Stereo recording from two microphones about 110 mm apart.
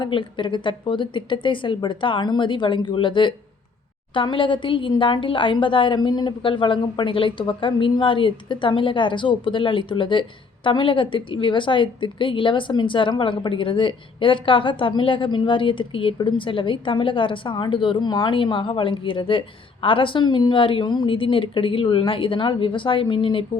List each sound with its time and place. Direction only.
0.0 s speech: 50° left (ahead or behind)